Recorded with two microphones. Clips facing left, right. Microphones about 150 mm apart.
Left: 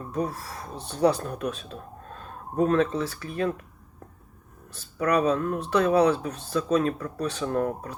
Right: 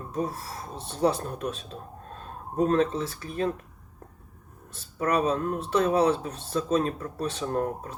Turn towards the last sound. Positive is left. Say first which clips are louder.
# left 2 dB
turn(degrees=-30)  # may be behind; listen again after turning